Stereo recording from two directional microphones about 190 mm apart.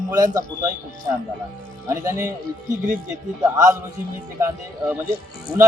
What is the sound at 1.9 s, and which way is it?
Speech, 15° right (ahead or behind).